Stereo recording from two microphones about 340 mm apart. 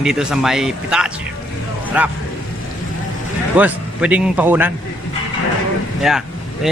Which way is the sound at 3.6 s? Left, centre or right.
Centre.